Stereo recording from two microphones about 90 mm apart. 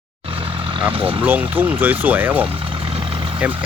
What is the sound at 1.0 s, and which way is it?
Speech, 15° right (ahead or behind).